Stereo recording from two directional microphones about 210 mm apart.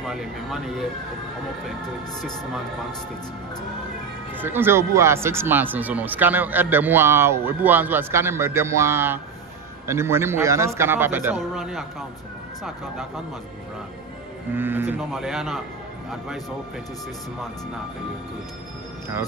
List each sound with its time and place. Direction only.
0.0 s speech: centre (ahead or behind)
4.4 s speech: 10° right (ahead or behind)
14.5 s speech: 10° right (ahead or behind)